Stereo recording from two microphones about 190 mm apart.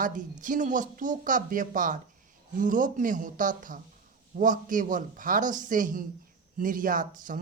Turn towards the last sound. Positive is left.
turn(degrees=-45)  # may be behind; listen again after turning